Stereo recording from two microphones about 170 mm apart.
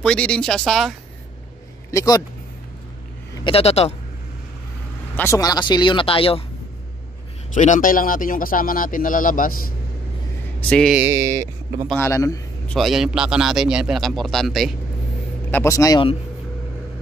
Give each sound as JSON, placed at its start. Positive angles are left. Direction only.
{"t": 0.0, "sound": "a man's voice", "side_deg": 5}
{"t": 1.9, "sound": "speech", "side_deg": 20}
{"t": 3.4, "sound": "a man's voice", "side_deg": 35}
{"t": 5.1, "sound": "speech", "side_deg": 15}
{"t": 7.5, "sound": "speech", "side_deg": 45}
{"t": 10.7, "sound": "a man's voice", "side_deg": 5}
{"t": 11.0, "sound": "speech", "side_deg": -15}
{"t": 11.9, "sound": "a man's voice", "side_deg": 15}
{"t": 12.6, "sound": "a man's voice", "side_deg": 0}
{"t": 15.5, "sound": "speech", "side_deg": 15}